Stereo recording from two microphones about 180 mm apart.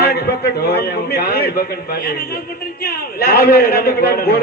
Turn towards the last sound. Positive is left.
turn(degrees=60)  # may be behind; listen again after turning